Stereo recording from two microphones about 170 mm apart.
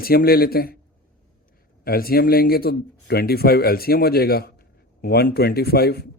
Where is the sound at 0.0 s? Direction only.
60° left (ahead or behind).